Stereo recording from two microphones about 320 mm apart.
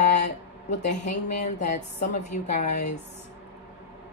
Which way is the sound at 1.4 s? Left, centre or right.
Left.